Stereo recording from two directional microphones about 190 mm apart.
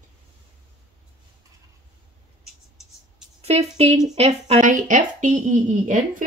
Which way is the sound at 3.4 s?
35° right (ahead or behind).